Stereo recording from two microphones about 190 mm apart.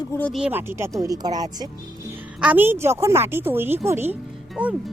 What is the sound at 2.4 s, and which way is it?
Speech, 10° right (ahead or behind).